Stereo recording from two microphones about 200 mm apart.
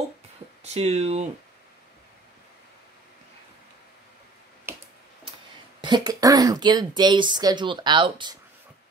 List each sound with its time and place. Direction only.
0.7 s speech: 30° right (ahead or behind)
5.8 s speech: 20° right (ahead or behind)